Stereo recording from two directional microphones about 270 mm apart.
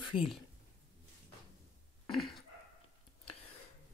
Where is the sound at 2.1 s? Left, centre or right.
Centre.